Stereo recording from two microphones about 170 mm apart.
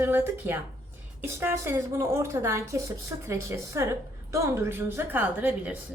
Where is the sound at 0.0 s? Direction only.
15° right (ahead or behind).